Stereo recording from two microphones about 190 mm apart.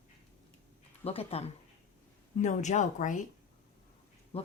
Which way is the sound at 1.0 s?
35° left (ahead or behind).